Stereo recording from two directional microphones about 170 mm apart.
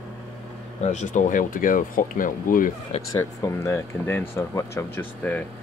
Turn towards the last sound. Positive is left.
turn(degrees=10)  # may be behind; listen again after turning